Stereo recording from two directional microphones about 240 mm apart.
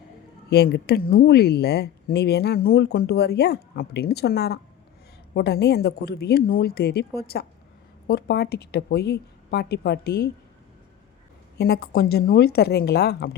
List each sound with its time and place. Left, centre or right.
0.5 s a woman's voice: left
11.5 s a woman's voice: left